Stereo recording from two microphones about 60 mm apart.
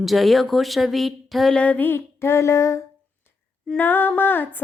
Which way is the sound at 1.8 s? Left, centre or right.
Left.